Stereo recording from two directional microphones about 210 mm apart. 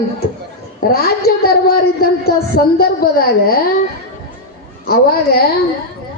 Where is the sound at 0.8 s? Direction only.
45° left (ahead or behind).